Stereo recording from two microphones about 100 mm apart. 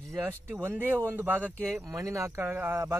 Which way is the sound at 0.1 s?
25° right (ahead or behind).